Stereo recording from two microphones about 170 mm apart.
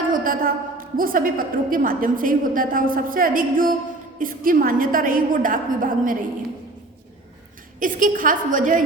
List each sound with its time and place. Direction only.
0.1 s a sound: 55° right (ahead or behind)
0.9 s a woman's voice: 55° right (ahead or behind)
7.8 s a woman's voice: 50° right (ahead or behind)